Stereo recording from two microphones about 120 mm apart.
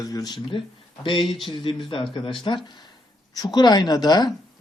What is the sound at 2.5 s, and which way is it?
Speech, 40° left (ahead or behind).